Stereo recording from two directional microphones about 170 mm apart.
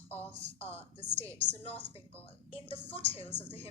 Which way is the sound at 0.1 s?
10° left (ahead or behind).